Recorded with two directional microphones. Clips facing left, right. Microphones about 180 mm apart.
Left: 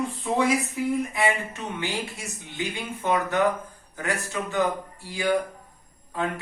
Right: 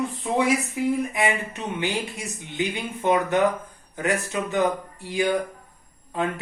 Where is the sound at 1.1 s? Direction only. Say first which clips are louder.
Right 1 dB; 20° right (ahead or behind).